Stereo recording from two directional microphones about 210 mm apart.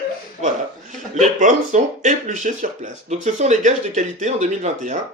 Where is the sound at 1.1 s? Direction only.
35° right (ahead or behind).